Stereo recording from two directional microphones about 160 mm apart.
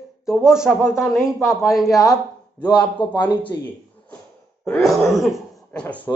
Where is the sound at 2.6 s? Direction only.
30° left (ahead or behind).